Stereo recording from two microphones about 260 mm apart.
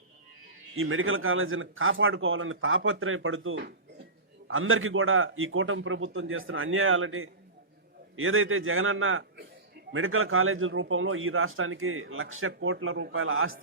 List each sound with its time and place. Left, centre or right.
0.8 s a man's voice: right